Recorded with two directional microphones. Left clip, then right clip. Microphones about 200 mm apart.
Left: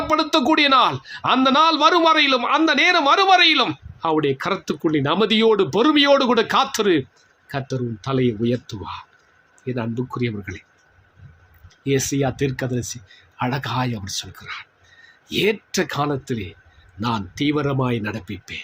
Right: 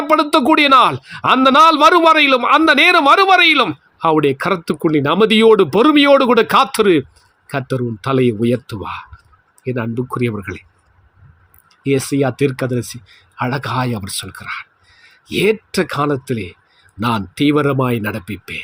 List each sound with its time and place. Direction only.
0.1 s a man's voice: 30° right (ahead or behind)
11.8 s a man's voice: 25° right (ahead or behind)